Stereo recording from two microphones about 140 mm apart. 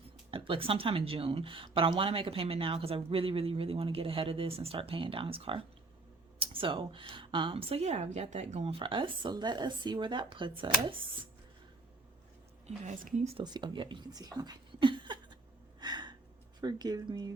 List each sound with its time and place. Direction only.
0.3 s speech: 40° right (ahead or behind)
12.6 s speech: 60° right (ahead or behind)
13.3 s speech: 30° right (ahead or behind)
15.8 s gasp: 30° right (ahead or behind)
16.6 s speech: 30° right (ahead or behind)